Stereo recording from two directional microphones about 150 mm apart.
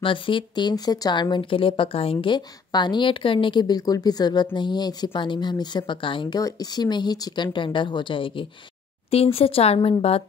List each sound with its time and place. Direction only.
0.0 s speech: 35° left (ahead or behind)